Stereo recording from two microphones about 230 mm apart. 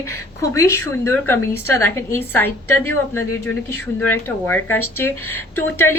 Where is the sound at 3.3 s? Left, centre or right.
Left.